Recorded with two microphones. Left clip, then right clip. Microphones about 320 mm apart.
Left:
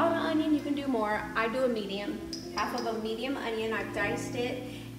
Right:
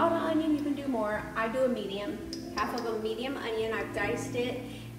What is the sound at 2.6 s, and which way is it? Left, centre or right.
A woman's voice, centre.